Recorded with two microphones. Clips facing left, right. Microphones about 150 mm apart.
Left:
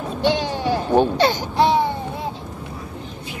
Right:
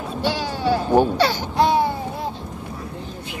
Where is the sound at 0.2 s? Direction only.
20° left (ahead or behind).